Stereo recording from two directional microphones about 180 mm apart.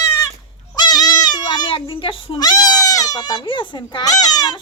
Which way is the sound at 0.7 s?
20° left (ahead or behind).